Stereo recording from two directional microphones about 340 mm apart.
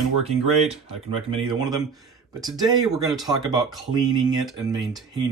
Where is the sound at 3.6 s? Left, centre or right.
Centre.